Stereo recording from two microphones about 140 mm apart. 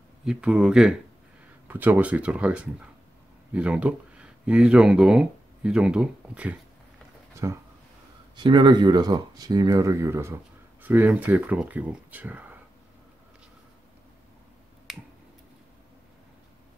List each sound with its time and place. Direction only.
0.2 s speech: 5° right (ahead or behind)
7.4 s speech: 20° right (ahead or behind)
8.4 s speech: 35° right (ahead or behind); by 12.5 s 10° right (ahead or behind)
14.9 s finger snapping: centre (ahead or behind)